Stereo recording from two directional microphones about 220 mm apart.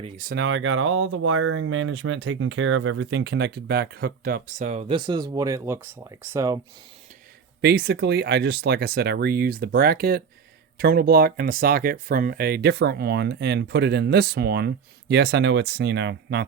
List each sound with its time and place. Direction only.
0.0 s speech: 35° right (ahead or behind)
0.3 s speech: 55° right (ahead or behind); by 6.6 s 15° right (ahead or behind)
7.6 s speech: 45° right (ahead or behind)